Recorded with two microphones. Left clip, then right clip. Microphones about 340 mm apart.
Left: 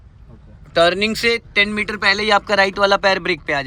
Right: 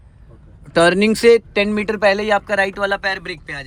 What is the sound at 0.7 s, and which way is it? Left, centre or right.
A man's voice, centre.